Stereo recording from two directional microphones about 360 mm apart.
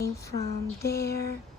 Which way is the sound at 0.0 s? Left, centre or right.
Centre.